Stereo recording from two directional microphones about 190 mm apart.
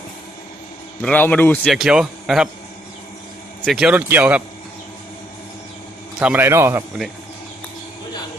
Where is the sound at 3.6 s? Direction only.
Centre (ahead or behind).